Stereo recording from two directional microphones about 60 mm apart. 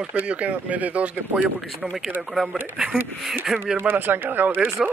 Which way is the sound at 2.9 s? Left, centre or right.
Centre.